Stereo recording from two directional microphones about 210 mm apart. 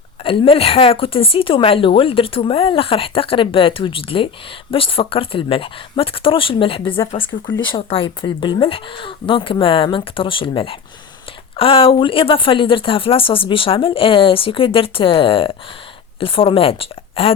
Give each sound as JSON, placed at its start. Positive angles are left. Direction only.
{"t": 0.3, "sound": "speech", "side_deg": 25}